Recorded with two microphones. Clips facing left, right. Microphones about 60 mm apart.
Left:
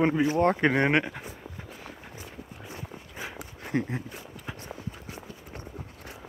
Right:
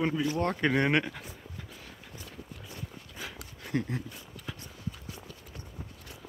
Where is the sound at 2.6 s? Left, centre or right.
Left.